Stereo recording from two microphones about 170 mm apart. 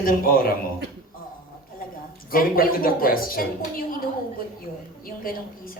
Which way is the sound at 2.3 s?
60° left (ahead or behind).